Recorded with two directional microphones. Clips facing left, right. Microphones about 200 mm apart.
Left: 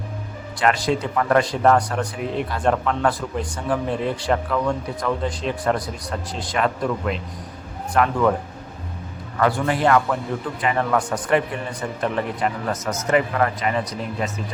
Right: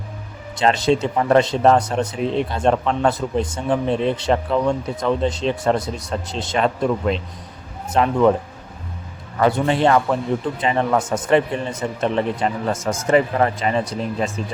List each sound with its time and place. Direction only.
0.5 s speech: 25° right (ahead or behind)
9.4 s speech: 25° right (ahead or behind)